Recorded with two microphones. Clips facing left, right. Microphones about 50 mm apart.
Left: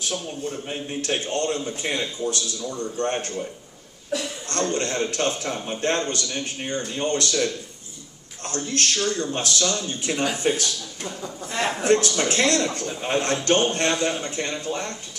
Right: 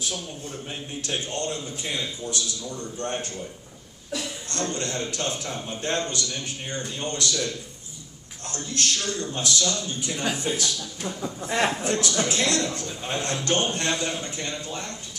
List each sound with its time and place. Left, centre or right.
0.1 s a man's voice: left
1.0 s a man's voice: left
4.7 s a man's voice: left
8.5 s a man's voice: left
11.0 s a sound: centre
11.4 s a man's voice: centre
11.8 s a man's voice: left